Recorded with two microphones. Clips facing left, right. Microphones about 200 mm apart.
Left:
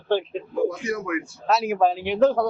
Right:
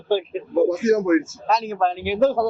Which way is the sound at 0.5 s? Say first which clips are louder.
Right 8 dB; 45° right (ahead or behind).